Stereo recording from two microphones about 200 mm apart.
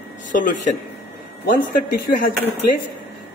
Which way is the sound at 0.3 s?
40° left (ahead or behind).